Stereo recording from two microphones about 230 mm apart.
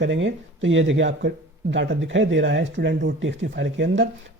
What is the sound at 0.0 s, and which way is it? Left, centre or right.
Speech, right.